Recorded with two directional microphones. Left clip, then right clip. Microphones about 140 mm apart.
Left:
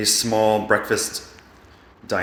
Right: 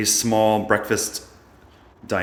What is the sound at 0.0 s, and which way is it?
Speech, 50° right (ahead or behind).